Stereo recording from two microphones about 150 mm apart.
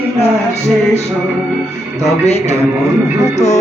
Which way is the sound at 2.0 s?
45° left (ahead or behind).